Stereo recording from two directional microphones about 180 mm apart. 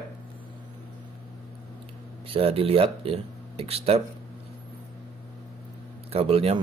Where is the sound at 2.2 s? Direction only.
30° right (ahead or behind).